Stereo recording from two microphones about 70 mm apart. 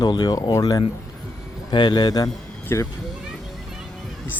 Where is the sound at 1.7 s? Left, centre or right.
Left.